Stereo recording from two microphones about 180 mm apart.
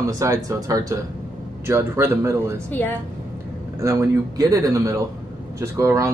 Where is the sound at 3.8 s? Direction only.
15° right (ahead or behind).